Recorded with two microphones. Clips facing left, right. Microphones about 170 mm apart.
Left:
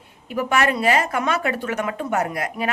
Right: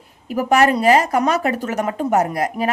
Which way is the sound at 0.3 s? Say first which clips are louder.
Right 5 dB; 40° right (ahead or behind).